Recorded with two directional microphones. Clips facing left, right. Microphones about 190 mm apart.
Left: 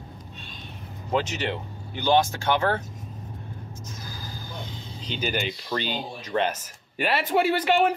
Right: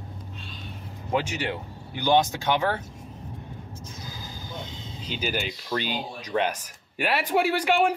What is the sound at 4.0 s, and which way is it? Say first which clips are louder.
Vehicle: even; 20° right (ahead or behind).